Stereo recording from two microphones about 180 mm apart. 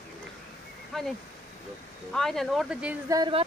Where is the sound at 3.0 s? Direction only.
20° right (ahead or behind).